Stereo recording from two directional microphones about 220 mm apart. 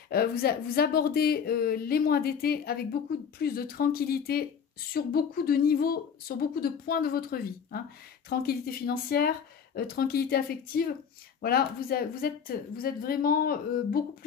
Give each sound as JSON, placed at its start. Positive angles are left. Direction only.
{"t": 0.1, "sound": "a woman's voice", "side_deg": 45}
{"t": 11.4, "sound": "a woman's voice", "side_deg": 45}